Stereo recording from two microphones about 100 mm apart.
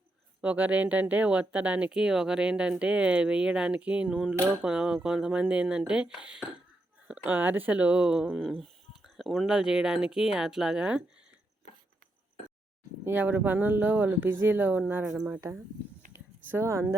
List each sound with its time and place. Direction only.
0.4 s speech: 15° right (ahead or behind)
13.1 s speech: 20° right (ahead or behind)
16.1 s a sound: 25° right (ahead or behind)